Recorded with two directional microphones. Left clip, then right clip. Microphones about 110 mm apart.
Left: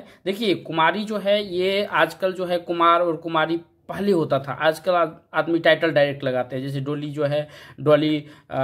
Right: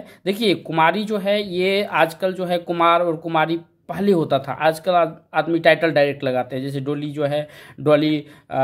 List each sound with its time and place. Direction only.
0.2 s speech: 30° right (ahead or behind)